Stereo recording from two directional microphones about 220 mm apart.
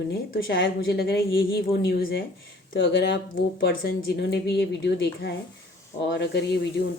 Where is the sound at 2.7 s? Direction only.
55° left (ahead or behind).